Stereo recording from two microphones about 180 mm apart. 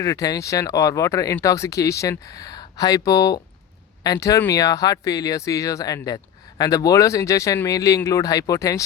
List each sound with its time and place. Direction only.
0.0 s speech: 20° left (ahead or behind)